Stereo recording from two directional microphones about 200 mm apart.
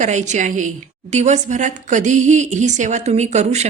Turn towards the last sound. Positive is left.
turn(degrees=-35)  # may be behind; listen again after turning